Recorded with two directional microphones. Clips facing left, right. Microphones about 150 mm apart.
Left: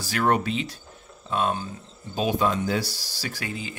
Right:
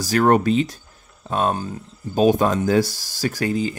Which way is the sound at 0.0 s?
40° right (ahead or behind).